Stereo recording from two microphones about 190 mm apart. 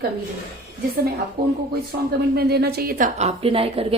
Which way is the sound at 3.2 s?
35° right (ahead or behind).